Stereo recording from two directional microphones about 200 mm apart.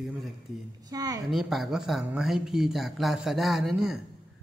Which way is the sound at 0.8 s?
20° right (ahead or behind).